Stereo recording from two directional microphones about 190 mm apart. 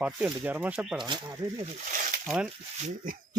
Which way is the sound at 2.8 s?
45° right (ahead or behind).